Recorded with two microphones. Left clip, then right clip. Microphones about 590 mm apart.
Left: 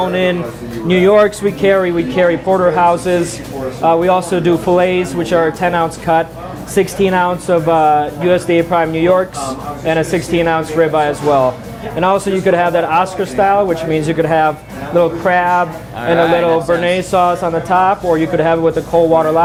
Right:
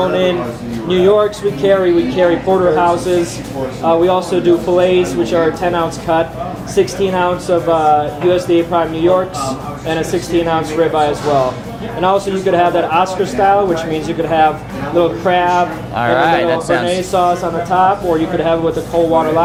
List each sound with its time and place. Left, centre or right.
0.0 s a sound: left
0.9 s a man's voice: left
16.0 s speech: right
16.8 s a man's voice: left